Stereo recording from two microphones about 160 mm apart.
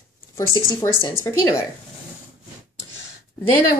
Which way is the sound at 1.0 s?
20° left (ahead or behind).